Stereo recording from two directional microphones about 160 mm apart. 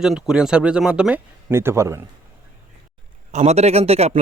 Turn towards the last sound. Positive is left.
turn(degrees=-40)  # may be behind; listen again after turning